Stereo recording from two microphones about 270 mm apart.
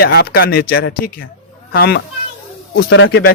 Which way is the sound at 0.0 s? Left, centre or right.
Left.